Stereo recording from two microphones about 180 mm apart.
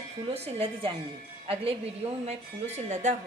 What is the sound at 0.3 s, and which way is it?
A woman's voice, 35° right (ahead or behind).